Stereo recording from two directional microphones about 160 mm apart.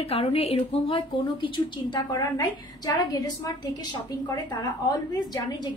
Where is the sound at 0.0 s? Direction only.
35° left (ahead or behind).